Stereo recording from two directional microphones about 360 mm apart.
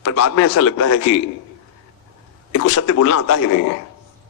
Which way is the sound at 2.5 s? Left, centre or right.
Left.